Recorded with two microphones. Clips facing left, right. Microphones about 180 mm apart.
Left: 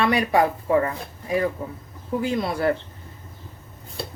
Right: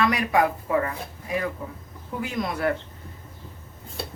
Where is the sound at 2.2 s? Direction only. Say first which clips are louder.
Left 3 dB; 30° left (ahead or behind).